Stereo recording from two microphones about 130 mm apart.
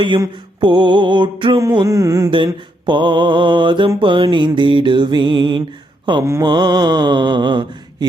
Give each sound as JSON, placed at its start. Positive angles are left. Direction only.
{"t": 0.6, "sound": "mantra", "side_deg": -35}
{"t": 1.7, "sound": "a sound", "side_deg": -30}
{"t": 2.3, "sound": "mantra", "side_deg": -40}